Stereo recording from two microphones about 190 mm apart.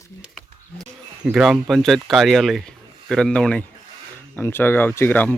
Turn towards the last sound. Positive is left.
turn(degrees=10)  # may be behind; listen again after turning